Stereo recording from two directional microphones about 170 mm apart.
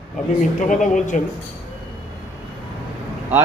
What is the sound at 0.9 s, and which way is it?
Speech, 50° left (ahead or behind).